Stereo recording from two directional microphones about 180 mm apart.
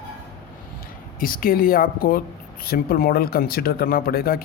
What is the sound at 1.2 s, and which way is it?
A man's voice, 50° left (ahead or behind).